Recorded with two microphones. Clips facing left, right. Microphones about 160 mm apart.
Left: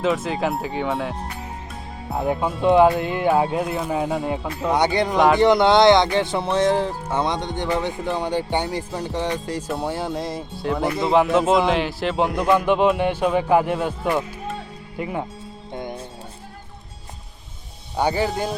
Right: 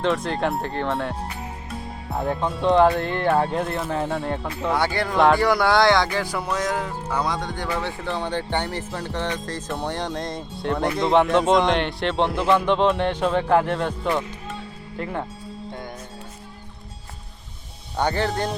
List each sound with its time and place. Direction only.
0.0 s speech: 5° left (ahead or behind)
2.2 s speech: 10° left (ahead or behind)
4.7 s speech: 20° left (ahead or behind)
15.7 s music: 20° left (ahead or behind)
17.9 s speech: 10° left (ahead or behind)